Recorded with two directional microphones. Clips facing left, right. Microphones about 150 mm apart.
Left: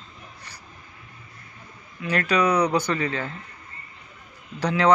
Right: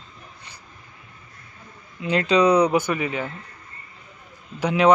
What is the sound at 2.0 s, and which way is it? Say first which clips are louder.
A man's voice: right 4 dB; 20° right (ahead or behind).